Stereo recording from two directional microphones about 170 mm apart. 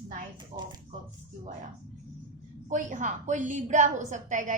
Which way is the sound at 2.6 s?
45° right (ahead or behind).